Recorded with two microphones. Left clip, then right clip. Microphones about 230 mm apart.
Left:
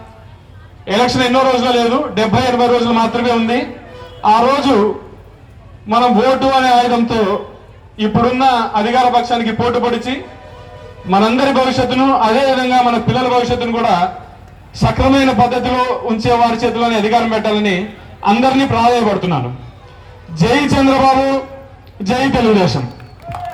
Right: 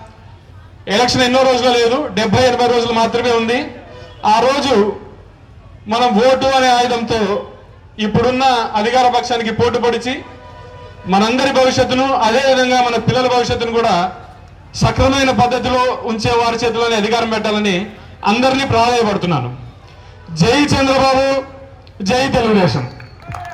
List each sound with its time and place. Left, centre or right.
0.9 s a man's voice: right
5.9 s a man's voice: right